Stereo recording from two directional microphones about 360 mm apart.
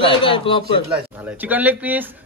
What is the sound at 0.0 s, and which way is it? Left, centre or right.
Speech, centre.